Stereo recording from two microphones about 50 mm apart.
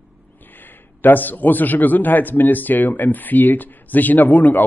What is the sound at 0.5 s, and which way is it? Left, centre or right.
A man's voice, left.